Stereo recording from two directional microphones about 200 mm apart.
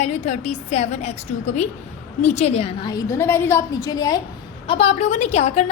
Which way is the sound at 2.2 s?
35° left (ahead or behind).